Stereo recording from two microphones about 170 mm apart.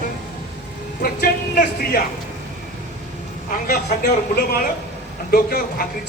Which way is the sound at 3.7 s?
60° left (ahead or behind).